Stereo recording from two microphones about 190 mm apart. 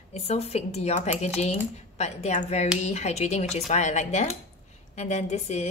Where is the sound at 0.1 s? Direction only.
35° left (ahead or behind).